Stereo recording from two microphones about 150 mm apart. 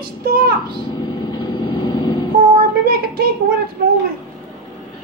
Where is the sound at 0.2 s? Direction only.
80° right.